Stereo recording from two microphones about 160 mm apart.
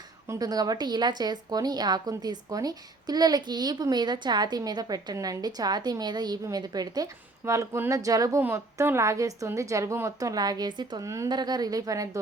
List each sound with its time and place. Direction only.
0.3 s speech: 25° right (ahead or behind)